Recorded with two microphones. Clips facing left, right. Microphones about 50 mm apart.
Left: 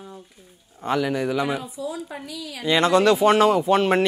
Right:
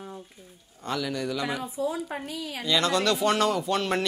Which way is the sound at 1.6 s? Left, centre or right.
Right.